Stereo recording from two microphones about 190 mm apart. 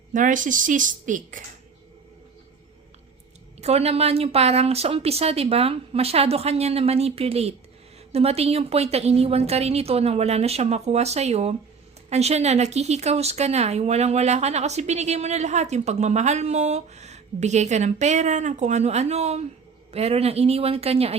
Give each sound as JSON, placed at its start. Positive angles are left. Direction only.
{"t": 0.1, "sound": "a woman's voice", "side_deg": -45}
{"t": 3.6, "sound": "speech", "side_deg": -35}